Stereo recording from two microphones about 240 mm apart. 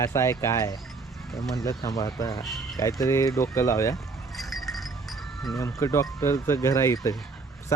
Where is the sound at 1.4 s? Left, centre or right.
Centre.